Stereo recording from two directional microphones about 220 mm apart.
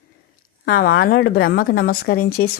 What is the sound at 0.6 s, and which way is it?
A woman's voice, 45° left (ahead or behind).